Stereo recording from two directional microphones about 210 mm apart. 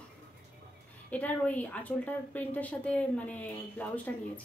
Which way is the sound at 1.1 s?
5° left (ahead or behind).